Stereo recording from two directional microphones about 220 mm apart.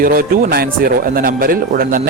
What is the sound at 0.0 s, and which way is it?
Speech, 45° right (ahead or behind).